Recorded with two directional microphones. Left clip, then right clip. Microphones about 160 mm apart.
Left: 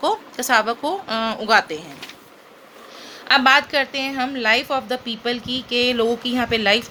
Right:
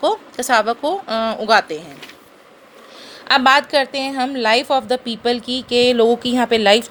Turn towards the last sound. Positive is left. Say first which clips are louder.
# right 5 dB
turn(degrees=-30)  # may be behind; listen again after turning